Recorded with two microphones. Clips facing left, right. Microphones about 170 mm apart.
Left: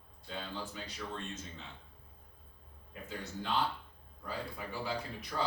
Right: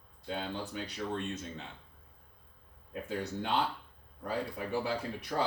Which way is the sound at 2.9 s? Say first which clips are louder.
Right 7 dB; 65° right (ahead or behind).